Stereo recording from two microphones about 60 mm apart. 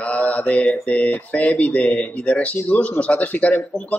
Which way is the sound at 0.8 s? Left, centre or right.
Left.